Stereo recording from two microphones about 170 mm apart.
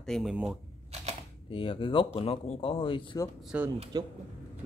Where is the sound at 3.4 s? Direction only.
10° right (ahead or behind).